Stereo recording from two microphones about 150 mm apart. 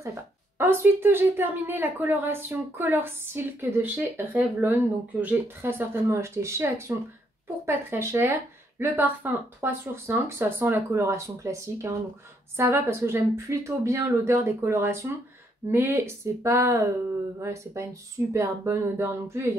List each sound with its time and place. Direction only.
0.0 s a woman's voice: 15° right (ahead or behind)